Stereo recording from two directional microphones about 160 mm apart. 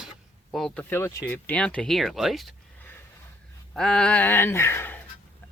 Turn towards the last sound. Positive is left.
turn(degrees=15)  # may be behind; listen again after turning